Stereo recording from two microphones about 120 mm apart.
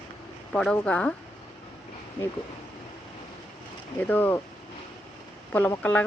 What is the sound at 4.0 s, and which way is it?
Speech, 15° left (ahead or behind).